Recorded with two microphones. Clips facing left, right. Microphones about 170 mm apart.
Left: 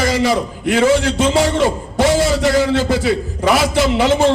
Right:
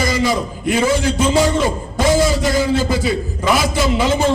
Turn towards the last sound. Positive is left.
turn(degrees=75)  # may be behind; listen again after turning